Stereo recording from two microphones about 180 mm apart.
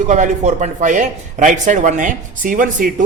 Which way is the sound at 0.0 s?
40° right (ahead or behind).